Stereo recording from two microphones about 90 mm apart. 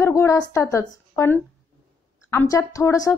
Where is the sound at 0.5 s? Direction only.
35° left (ahead or behind).